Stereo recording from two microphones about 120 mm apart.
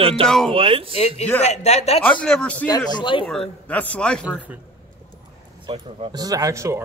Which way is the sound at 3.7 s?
10° left (ahead or behind).